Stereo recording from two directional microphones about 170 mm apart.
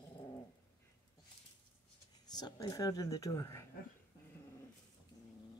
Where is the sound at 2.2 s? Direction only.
20° left (ahead or behind).